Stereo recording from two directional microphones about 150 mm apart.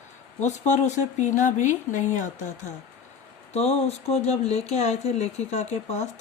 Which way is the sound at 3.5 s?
45° left (ahead or behind).